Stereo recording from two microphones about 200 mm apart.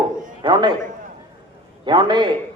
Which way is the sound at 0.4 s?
20° right (ahead or behind).